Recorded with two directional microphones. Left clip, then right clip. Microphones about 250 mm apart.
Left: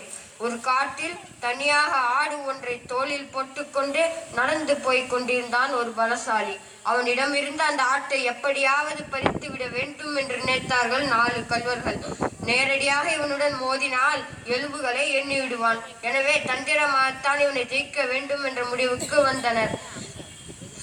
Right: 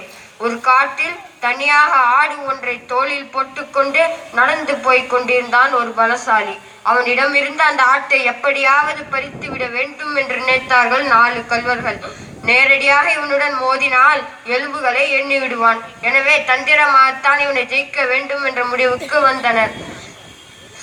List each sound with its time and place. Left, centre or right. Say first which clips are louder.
0.4 s a woman's voice: right 11 dB; left